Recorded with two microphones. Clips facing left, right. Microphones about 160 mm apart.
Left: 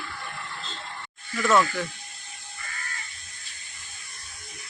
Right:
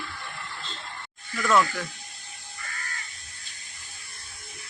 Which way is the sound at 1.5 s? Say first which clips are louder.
Left 1 dB; 5° left (ahead or behind).